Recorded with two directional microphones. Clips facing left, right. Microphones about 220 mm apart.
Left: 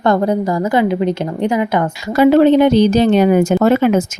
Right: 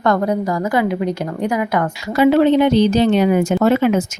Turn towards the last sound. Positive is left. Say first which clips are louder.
# left 2 dB
turn(degrees=45)  # may be behind; listen again after turning